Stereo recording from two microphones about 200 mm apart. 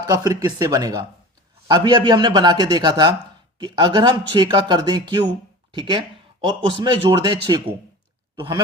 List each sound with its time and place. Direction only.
0.0 s a man's voice: 20° right (ahead or behind)
8.4 s a man's voice: 20° right (ahead or behind)